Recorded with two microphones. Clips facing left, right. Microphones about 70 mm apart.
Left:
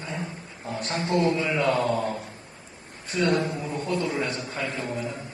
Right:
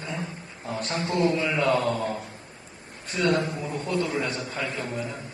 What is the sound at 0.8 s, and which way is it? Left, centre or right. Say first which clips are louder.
A man's voice: left 1 dB; left.